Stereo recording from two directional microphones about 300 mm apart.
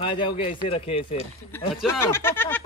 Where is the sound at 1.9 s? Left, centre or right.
Centre.